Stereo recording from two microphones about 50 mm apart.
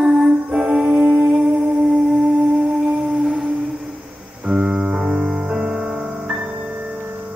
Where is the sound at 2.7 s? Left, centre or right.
Centre.